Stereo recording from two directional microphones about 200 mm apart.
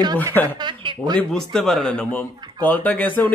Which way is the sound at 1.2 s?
Centre (ahead or behind).